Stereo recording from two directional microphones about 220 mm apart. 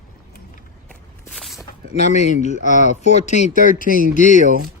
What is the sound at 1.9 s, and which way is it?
Speech, 30° left (ahead or behind).